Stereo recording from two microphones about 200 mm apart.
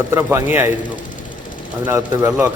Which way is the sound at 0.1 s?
10° right (ahead or behind).